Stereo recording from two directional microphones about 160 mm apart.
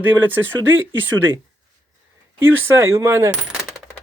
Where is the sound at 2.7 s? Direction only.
20° right (ahead or behind).